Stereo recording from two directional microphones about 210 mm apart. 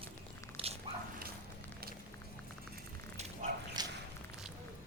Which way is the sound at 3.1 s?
30° right (ahead or behind).